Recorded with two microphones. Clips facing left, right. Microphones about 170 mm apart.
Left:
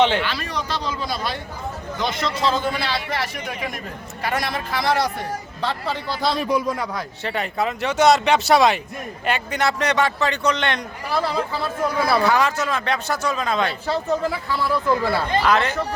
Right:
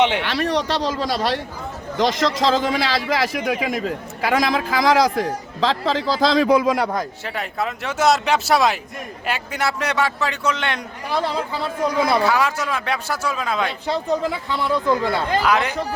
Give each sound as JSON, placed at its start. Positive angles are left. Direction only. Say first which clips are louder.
{"t": 0.2, "sound": "speech", "louder": "right 5 dB", "side_deg": -70}
{"t": 2.0, "sound": "a man's voice", "louder": "right 6 dB", "side_deg": -90}
{"t": 7.3, "sound": "speech", "louder": "left 2 dB", "side_deg": 0}
{"t": 11.1, "sound": "speech", "louder": "even", "side_deg": -15}
{"t": 12.2, "sound": "speech", "louder": "even", "side_deg": -5}
{"t": 13.8, "sound": "speech", "louder": "right 1 dB", "side_deg": -15}